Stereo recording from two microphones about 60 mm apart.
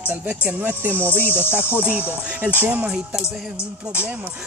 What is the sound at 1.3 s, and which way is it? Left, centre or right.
Speech, left.